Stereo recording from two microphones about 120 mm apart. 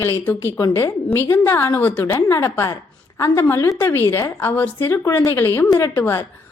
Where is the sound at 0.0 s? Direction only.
20° left (ahead or behind).